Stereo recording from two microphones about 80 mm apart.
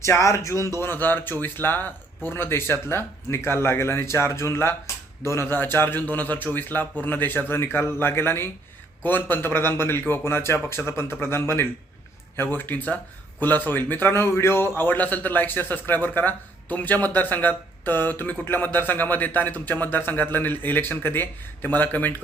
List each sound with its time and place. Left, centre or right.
0.0 s a man's voice: left